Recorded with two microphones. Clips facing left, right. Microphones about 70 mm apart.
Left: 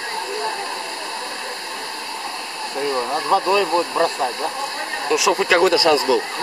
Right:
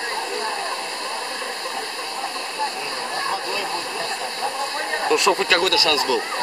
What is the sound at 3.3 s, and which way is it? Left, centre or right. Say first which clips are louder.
Speech: left 9 dB; left.